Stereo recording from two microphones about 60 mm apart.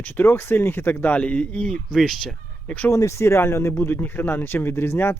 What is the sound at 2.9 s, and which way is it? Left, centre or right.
Speech, left.